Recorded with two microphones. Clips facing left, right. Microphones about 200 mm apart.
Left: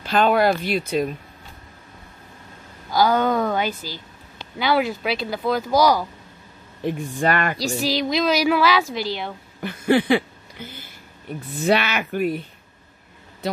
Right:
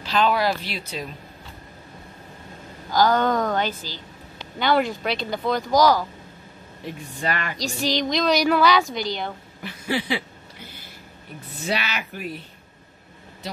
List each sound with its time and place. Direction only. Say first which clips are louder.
0.0 s speech: left 4 dB; 50° left (ahead or behind)
2.9 s a woman's voice: left 1 dB; 10° left (ahead or behind)
7.2 s speech: left 6 dB; 50° left (ahead or behind)
7.5 s a woman's voice: left 2 dB; 5° left (ahead or behind)
9.6 s speech: left 8 dB; 55° left (ahead or behind)
11.6 s speech: left 7 dB; 55° left (ahead or behind)